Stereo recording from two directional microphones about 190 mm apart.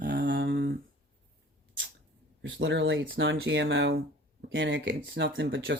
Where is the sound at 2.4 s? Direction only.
80° right.